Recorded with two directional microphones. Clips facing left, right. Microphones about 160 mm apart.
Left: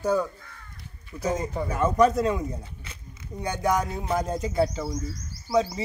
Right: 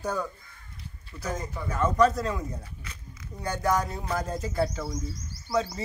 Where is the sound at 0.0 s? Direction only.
10° left (ahead or behind).